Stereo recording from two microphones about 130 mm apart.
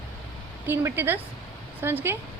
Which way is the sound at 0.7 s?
15° right (ahead or behind).